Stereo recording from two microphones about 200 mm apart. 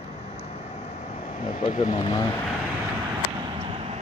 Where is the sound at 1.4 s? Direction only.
40° left (ahead or behind).